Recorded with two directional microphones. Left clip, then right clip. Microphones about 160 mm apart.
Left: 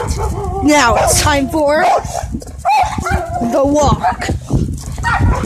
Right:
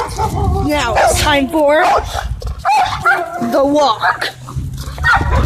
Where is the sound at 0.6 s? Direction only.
45° left (ahead or behind).